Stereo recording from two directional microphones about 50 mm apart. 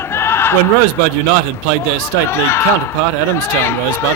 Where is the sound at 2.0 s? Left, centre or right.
Left.